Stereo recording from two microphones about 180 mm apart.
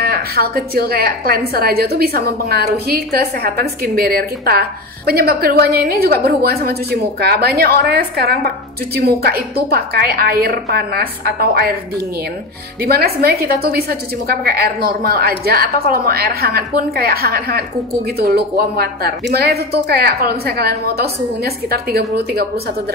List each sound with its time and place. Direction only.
0.0 s a woman's voice: 60° right (ahead or behind)
12.8 s a woman's voice: 60° right (ahead or behind)